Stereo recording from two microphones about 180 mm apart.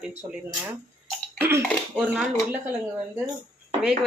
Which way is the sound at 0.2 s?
10° right (ahead or behind).